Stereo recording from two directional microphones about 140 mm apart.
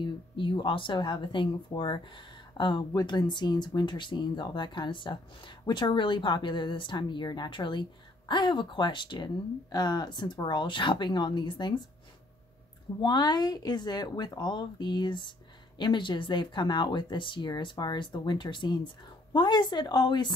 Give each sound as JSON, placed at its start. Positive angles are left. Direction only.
{"t": 0.0, "sound": "speech", "side_deg": 35}
{"t": 13.0, "sound": "speech", "side_deg": 30}